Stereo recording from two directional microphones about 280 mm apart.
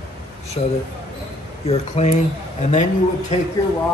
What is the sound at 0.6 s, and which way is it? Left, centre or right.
Speech, centre.